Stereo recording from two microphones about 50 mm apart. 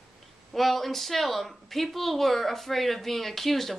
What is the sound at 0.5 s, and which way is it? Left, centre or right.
Speech, centre.